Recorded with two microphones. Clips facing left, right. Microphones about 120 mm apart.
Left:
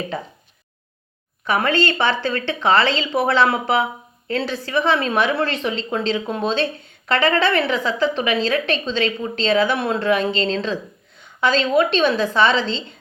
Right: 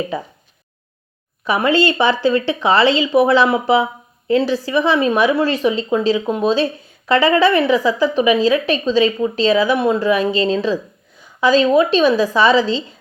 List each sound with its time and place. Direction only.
1.5 s a woman's voice: 15° right (ahead or behind)
11.2 s a sound: 10° right (ahead or behind)
11.9 s a woman's voice: 10° right (ahead or behind)